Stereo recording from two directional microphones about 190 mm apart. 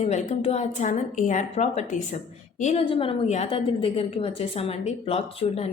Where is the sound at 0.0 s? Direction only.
35° left (ahead or behind).